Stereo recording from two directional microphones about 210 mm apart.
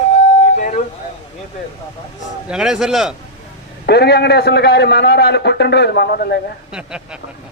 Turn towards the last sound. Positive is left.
turn(degrees=-5)  # may be behind; listen again after turning